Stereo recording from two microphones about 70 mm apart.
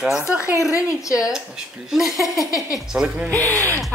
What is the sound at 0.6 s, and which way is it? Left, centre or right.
Speech, left.